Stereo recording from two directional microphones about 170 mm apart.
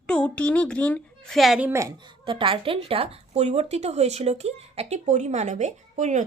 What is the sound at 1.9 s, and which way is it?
Speech, 30° right (ahead or behind).